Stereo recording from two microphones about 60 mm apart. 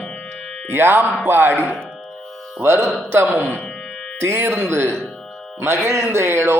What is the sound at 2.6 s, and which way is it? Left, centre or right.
Speech, right.